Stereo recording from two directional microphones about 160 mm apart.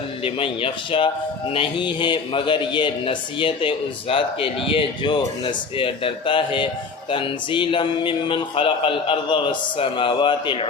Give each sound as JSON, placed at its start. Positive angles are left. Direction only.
{"t": 0.3, "sound": "a man's voice", "side_deg": 35}